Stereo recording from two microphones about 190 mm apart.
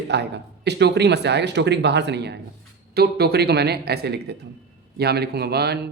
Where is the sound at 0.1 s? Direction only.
65° right (ahead or behind).